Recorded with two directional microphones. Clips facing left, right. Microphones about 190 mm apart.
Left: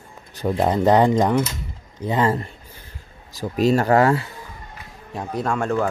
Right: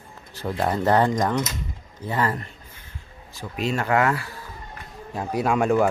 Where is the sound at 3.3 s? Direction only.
40° left (ahead or behind).